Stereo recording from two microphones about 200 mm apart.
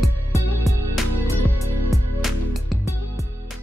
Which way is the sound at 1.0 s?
Centre (ahead or behind).